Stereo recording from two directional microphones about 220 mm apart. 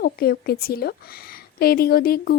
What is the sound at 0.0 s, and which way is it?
Speech, 45° left (ahead or behind).